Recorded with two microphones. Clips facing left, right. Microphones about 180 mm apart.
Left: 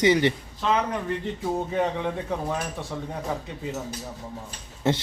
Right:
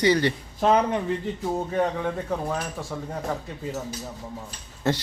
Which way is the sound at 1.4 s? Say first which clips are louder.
Even; centre (ahead or behind).